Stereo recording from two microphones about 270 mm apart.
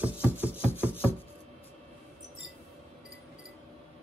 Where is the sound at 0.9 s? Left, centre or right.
Centre.